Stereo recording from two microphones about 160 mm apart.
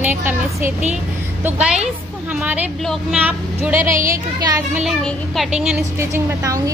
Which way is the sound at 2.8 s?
5° left (ahead or behind).